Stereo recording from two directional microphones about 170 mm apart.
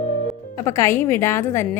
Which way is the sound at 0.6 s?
15° left (ahead or behind).